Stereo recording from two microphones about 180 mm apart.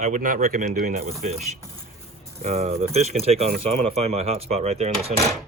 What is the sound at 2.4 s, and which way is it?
Speech, 35° right (ahead or behind).